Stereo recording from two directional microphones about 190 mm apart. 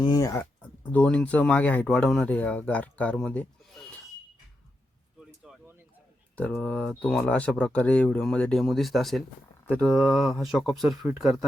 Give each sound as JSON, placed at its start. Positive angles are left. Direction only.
{"t": 0.0, "sound": "speech", "side_deg": 20}
{"t": 5.4, "sound": "a sound", "side_deg": -5}
{"t": 6.3, "sound": "speech", "side_deg": 5}